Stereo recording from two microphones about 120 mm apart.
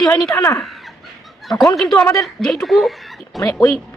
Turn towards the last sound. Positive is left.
turn(degrees=5)  # may be behind; listen again after turning